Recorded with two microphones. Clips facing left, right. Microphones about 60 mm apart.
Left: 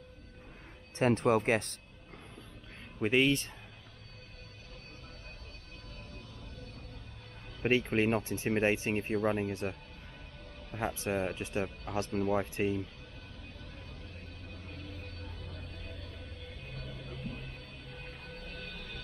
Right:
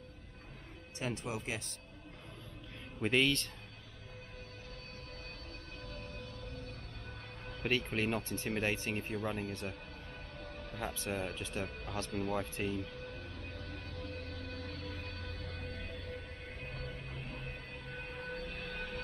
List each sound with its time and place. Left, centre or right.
0.9 s speech: left
3.0 s speech: centre
6.1 s music: right
7.6 s speech: left
12.1 s speech: left
12.7 s speech: right
13.7 s music: right